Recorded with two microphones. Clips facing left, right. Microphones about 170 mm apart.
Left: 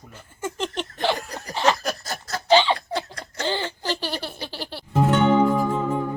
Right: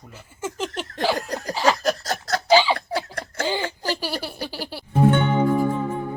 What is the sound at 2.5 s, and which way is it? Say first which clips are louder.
Laughter: even; 5° right (ahead or behind).